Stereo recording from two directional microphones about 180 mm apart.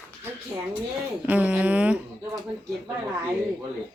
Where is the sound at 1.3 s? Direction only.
5° right (ahead or behind).